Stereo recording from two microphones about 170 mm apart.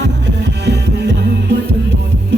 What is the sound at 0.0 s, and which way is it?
Music, 90° right.